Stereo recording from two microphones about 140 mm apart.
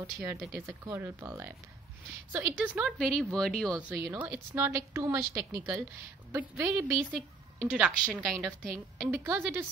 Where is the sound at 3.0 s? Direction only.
5° left (ahead or behind).